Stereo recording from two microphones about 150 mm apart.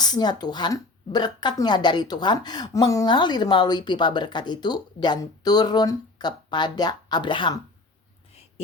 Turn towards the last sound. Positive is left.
turn(degrees=35)  # may be behind; listen again after turning